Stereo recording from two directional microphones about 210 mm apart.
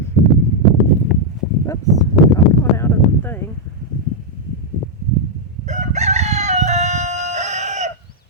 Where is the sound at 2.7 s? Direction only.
10° left (ahead or behind).